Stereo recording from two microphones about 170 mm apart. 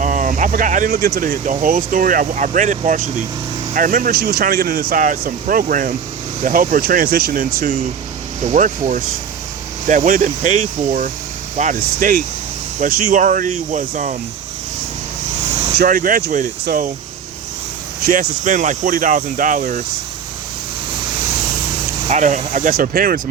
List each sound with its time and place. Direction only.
0.0 s speech: 50° right (ahead or behind)
15.4 s vehicle: 40° right (ahead or behind)
15.8 s speech: 55° right (ahead or behind)
18.0 s speech: 55° right (ahead or behind)
22.0 s speech: 45° right (ahead or behind)